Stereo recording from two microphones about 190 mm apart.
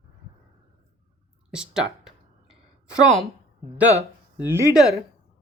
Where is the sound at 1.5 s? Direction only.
5° right (ahead or behind).